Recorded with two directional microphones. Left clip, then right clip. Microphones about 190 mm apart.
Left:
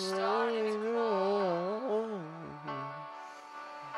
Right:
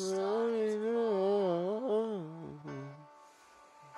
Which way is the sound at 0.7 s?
15° right (ahead or behind).